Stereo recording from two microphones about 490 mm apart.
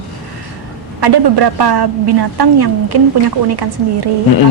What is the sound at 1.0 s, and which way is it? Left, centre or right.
A woman's voice, right.